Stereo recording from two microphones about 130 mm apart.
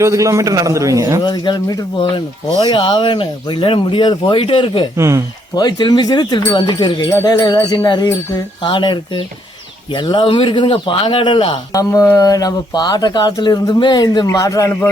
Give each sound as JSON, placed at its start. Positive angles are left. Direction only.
{"t": 0.0, "sound": "a man's voice", "side_deg": -25}
{"t": 1.2, "sound": "speech", "side_deg": 35}
{"t": 4.9, "sound": "a man's voice", "side_deg": -20}
{"t": 5.5, "sound": "speech", "side_deg": 30}
{"t": 11.7, "sound": "speech", "side_deg": 25}